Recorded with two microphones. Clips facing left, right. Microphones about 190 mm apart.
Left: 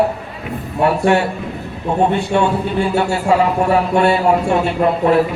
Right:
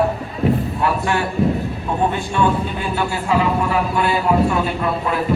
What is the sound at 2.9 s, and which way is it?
Speech, 70° left (ahead or behind).